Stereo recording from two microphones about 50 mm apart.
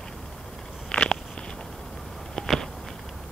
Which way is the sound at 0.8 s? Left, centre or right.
Centre.